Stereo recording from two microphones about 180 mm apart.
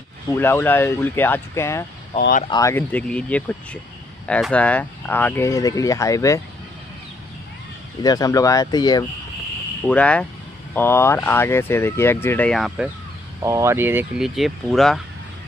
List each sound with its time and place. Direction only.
0.3 s speech: 15° left (ahead or behind)
2.1 s speech: 50° left (ahead or behind)
2.5 s speech: 15° left (ahead or behind)
8.0 s speech: 20° left (ahead or behind)
9.8 s speech: 5° left (ahead or behind)
13.4 s speech: 15° right (ahead or behind); by 15.0 s centre (ahead or behind)